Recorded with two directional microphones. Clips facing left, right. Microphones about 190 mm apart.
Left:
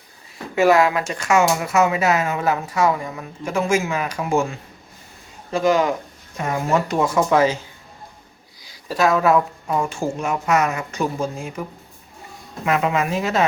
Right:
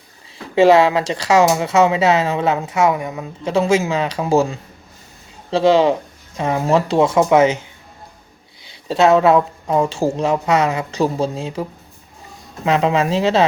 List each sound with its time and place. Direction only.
0.3 s speech: 25° right (ahead or behind)
8.6 s speech: 25° right (ahead or behind)
12.6 s speech: 30° right (ahead or behind)